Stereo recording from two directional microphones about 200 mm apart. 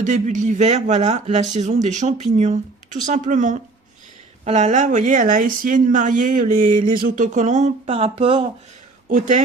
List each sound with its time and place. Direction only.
0.0 s speech: 40° right (ahead or behind)
9.0 s speech: 40° right (ahead or behind)